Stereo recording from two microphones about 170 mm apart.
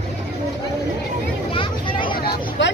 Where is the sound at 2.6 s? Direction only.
90° left.